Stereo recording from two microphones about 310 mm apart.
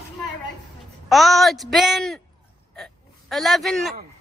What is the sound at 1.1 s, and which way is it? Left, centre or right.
A woman's voice, centre.